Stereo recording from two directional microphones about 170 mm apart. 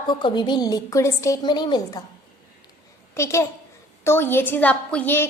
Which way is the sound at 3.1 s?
15° left (ahead or behind).